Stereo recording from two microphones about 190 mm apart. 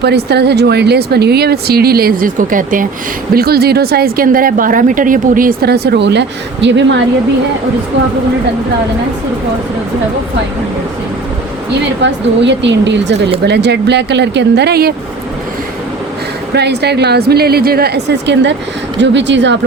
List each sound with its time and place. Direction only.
0.0 s speech: 60° right (ahead or behind)
12.0 s a woman's voice: 70° right (ahead or behind)
16.6 s a woman's voice: 60° right (ahead or behind)